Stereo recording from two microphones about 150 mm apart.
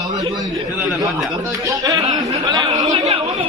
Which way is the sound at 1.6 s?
25° right (ahead or behind).